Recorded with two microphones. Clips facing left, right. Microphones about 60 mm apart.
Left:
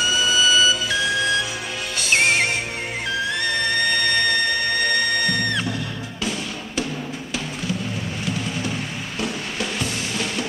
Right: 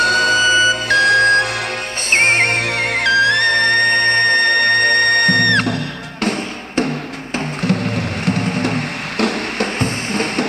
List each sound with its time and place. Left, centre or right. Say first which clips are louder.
0.0 s music: right 6 dB; right
2.0 s music: right 5 dB; right
6.2 s music: right 7 dB; right